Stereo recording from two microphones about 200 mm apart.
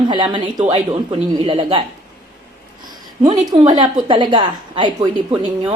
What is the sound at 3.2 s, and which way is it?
A woman's voice, 20° right (ahead or behind).